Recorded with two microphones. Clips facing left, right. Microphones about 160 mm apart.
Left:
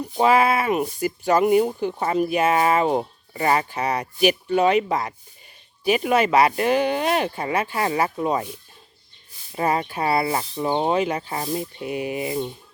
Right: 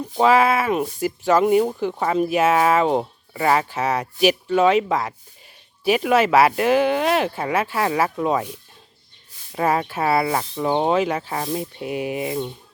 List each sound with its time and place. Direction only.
0.2 s speech: centre (ahead or behind)
9.6 s speech: centre (ahead or behind)